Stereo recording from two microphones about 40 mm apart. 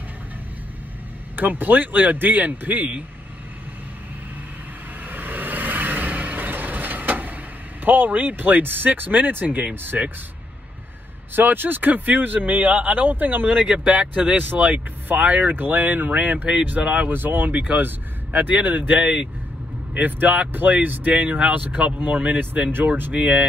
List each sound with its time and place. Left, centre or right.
1.3 s speech: right
5.0 s vehicle: right
7.8 s speech: right
11.3 s speech: right
14.6 s speech: right
15.2 s speech: right
15.5 s speech: right
17.5 s speech: right
17.7 s speech: right
18.5 s speech: right
18.9 s speech: right
19.9 s speech: right
21.5 s speech: right
23.1 s speech: right